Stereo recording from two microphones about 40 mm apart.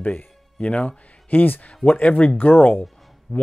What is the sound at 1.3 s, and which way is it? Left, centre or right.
Speech, left.